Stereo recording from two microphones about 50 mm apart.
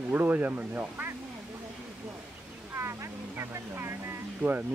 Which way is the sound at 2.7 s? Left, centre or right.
Right.